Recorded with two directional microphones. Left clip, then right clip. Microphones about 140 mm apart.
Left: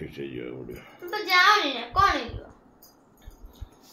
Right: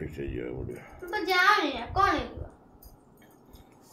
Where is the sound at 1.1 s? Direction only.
55° left (ahead or behind).